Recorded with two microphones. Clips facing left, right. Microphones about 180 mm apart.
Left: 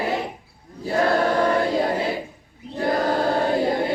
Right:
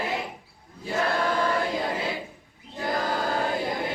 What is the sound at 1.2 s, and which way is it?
Choir, 35° left (ahead or behind).